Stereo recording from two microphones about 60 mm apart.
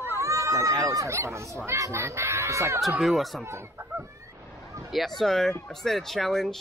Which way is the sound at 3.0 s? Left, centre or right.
Centre.